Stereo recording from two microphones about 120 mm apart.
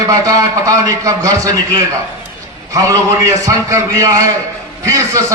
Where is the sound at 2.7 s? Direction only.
30° right (ahead or behind).